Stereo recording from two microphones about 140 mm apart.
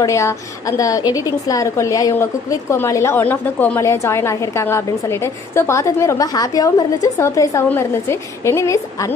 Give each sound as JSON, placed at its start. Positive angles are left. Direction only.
{"t": 0.0, "sound": "a woman's voice", "side_deg": 20}